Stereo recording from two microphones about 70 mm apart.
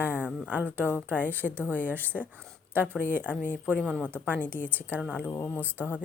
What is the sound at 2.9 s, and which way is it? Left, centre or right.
A woman's voice, left.